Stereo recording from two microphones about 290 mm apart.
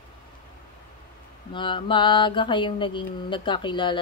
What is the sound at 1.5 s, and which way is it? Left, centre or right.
Mantra, centre.